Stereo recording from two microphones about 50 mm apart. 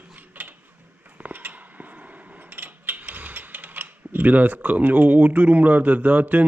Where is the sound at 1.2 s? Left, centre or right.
Right.